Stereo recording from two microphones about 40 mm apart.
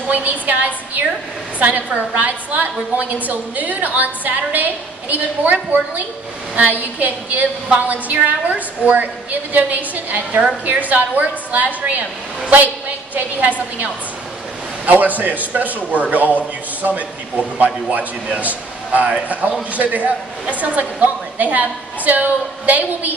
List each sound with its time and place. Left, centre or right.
0.1 s a woman's voice: right
14.9 s a woman's voice: right